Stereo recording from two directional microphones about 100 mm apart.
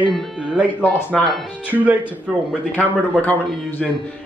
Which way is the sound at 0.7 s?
20° left (ahead or behind).